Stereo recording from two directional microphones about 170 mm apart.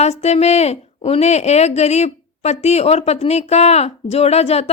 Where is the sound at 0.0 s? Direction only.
40° left (ahead or behind).